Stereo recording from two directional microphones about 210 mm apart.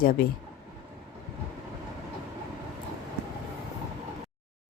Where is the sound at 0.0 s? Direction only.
40° left (ahead or behind).